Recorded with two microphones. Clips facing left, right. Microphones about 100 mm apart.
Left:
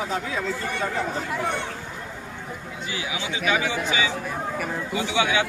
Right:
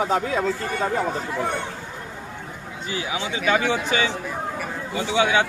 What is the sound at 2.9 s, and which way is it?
Speech, 35° right (ahead or behind).